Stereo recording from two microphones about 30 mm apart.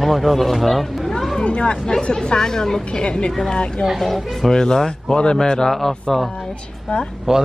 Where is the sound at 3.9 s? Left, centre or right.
Centre.